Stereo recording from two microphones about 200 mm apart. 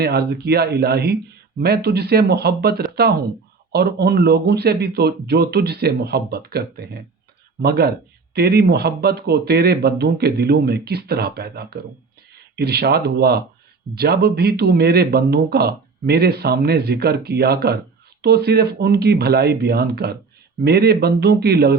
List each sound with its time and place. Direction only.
0.0 s speech: 55° right (ahead or behind)